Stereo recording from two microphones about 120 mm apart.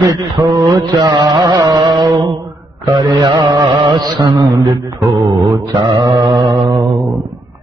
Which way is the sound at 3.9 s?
30° right (ahead or behind).